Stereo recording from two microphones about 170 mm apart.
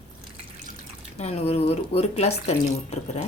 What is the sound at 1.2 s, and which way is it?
A woman's voice, 40° left (ahead or behind).